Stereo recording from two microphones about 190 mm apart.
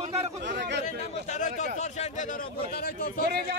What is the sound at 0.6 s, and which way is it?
Chatter, 65° right (ahead or behind).